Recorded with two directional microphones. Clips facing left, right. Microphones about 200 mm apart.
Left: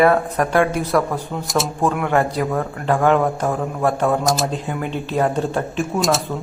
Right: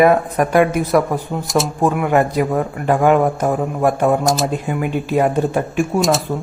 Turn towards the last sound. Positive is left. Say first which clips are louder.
# right 4 dB
turn(degrees=-10)  # may be behind; listen again after turning